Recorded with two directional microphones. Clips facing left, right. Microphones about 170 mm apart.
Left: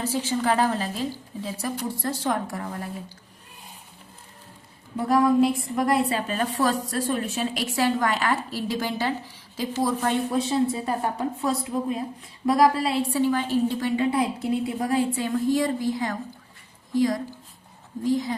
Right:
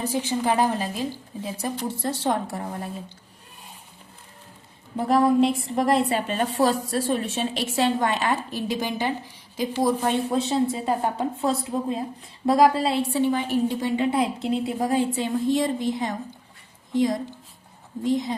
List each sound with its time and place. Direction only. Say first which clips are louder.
0.0 s a woman's voice: even; 15° right (ahead or behind)
4.9 s a woman's voice: right 1 dB; 25° right (ahead or behind)